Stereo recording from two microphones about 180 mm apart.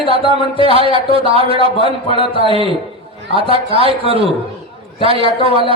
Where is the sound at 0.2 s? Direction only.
30° right (ahead or behind).